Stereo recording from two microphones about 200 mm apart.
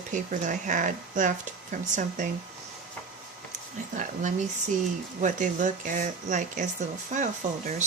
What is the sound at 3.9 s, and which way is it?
Speech, 40° right (ahead or behind).